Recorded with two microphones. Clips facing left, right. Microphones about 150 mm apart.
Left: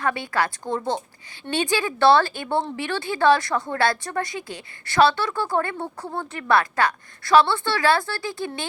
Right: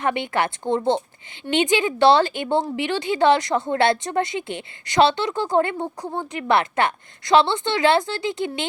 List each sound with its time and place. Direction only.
0.0 s speech: 20° right (ahead or behind)